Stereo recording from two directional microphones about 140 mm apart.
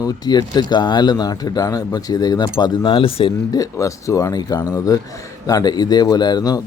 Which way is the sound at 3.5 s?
25° left (ahead or behind).